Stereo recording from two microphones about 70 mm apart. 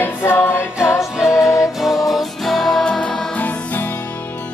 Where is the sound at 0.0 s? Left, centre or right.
Left.